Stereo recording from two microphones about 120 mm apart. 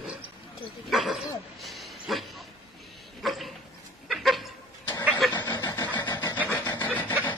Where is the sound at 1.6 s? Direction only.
Centre (ahead or behind).